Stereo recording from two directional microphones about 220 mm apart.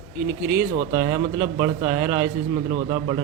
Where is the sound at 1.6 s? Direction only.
10° right (ahead or behind).